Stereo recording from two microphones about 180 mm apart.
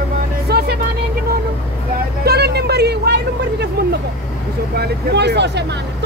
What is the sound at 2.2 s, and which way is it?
Vehicle, 65° right (ahead or behind).